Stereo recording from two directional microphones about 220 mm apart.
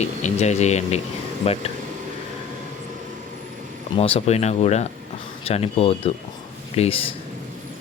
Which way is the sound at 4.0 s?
25° left (ahead or behind).